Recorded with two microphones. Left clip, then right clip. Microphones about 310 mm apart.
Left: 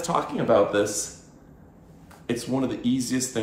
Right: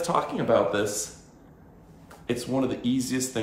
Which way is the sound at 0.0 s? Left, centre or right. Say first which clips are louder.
Even; centre.